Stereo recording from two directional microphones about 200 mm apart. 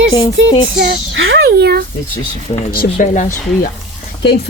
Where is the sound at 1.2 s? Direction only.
75° right (ahead or behind).